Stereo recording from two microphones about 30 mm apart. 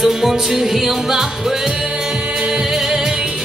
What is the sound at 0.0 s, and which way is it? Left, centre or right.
Music, centre.